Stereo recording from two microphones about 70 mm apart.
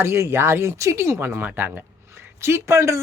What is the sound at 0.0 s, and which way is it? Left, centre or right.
Speech, right.